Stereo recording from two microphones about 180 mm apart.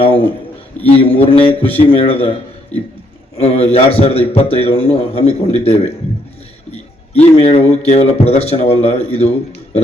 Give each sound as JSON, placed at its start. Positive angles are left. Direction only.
{"t": 0.0, "sound": "a man's voice", "side_deg": 30}
{"t": 7.3, "sound": "a man's voice", "side_deg": 35}